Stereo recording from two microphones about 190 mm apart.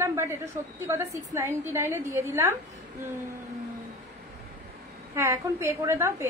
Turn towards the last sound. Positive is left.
turn(degrees=-15)  # may be behind; listen again after turning